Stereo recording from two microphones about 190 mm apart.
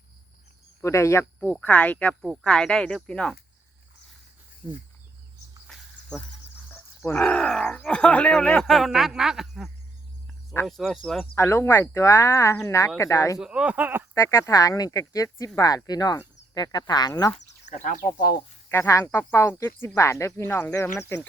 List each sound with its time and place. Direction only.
0.8 s speech: 15° left (ahead or behind)
5.6 s a sound: centre (ahead or behind)
6.7 s speech: 10° left (ahead or behind)
11.3 s speech: 15° left (ahead or behind)
13.4 s speech: 5° right (ahead or behind)
14.1 s speech: 15° left (ahead or behind)
17.3 s speech: 40° left (ahead or behind)
18.7 s speech: 15° left (ahead or behind)